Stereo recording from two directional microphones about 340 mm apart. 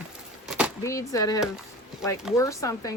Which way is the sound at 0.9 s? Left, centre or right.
Centre.